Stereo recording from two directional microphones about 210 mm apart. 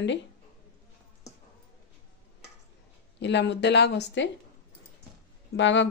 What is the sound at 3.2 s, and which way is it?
Speech, 55° left (ahead or behind).